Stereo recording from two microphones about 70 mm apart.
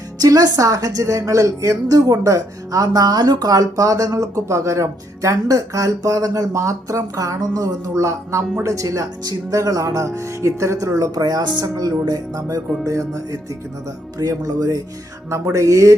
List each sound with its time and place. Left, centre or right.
0.2 s a woman's voice: right
14.2 s a woman's voice: right
15.5 s speech: right